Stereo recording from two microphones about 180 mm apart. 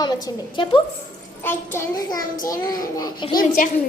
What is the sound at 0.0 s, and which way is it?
Speech, 20° left (ahead or behind).